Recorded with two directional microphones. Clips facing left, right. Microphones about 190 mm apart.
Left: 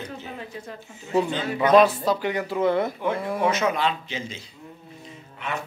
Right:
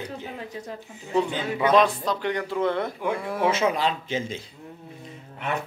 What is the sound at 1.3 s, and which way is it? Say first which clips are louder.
Speech: left 1 dB; 10° right (ahead or behind).